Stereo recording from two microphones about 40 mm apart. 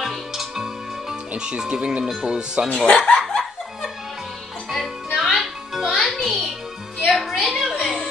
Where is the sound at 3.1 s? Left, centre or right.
Centre.